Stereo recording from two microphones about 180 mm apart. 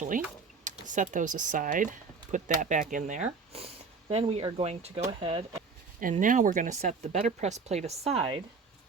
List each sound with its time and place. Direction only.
0.6 s speech: 45° right (ahead or behind)
6.0 s speech: 50° right (ahead or behind)